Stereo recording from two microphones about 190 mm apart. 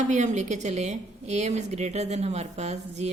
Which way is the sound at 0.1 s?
40° right (ahead or behind).